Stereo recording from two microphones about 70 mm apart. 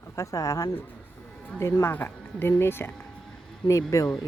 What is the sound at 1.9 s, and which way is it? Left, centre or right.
Speech, left.